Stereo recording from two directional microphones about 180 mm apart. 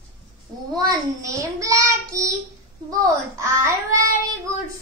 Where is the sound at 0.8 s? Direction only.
20° right (ahead or behind).